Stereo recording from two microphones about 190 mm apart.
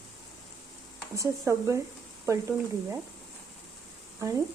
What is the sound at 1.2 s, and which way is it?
Speech, 15° right (ahead or behind).